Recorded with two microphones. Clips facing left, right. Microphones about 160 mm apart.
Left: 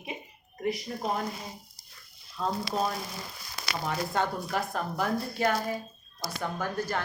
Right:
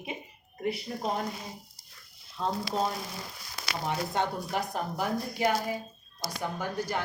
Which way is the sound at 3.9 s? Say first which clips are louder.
Even; 20° right (ahead or behind).